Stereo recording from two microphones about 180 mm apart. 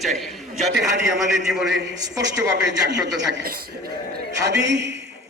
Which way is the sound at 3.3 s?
60° right (ahead or behind).